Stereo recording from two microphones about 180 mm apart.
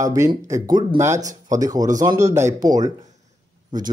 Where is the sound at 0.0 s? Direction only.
20° right (ahead or behind).